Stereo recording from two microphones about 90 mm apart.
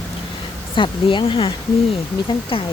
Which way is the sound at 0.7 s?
65° left (ahead or behind).